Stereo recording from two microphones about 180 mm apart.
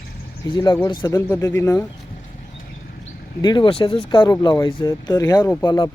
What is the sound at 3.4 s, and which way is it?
Speech, 25° left (ahead or behind).